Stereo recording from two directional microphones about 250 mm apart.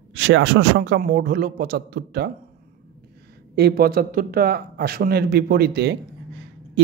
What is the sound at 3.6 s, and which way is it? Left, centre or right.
Speech, right.